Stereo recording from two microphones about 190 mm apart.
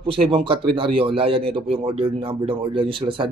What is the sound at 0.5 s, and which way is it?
A man's voice, 30° right (ahead or behind).